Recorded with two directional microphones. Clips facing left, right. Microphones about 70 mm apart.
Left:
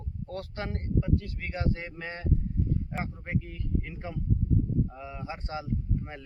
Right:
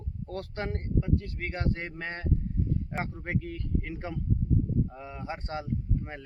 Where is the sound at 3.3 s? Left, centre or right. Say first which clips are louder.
Even; right.